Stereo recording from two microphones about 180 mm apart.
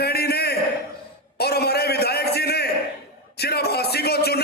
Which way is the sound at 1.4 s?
60° left (ahead or behind).